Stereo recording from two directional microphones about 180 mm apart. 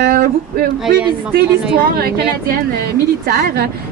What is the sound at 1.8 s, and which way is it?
A woman's voice, 55° right (ahead or behind).